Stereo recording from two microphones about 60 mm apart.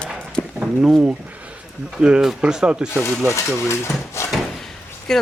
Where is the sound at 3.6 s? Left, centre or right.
Left.